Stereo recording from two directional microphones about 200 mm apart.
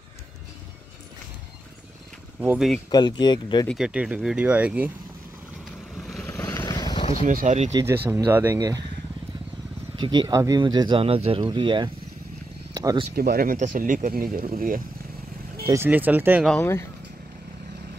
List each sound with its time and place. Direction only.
2.4 s speech: 10° right (ahead or behind)
2.9 s speech: 20° left (ahead or behind)
3.6 s speech: centre (ahead or behind)
6.2 s vehicle: 15° left (ahead or behind)
7.2 s speech: 40° right (ahead or behind)
7.7 s speech: 15° right (ahead or behind)
9.9 s speech: 20° right (ahead or behind)
12.7 s a sound: 20° right (ahead or behind)
13.1 s speech: 50° right (ahead or behind)
15.7 s speech: 10° right (ahead or behind)
16.4 s speech: 10° left (ahead or behind)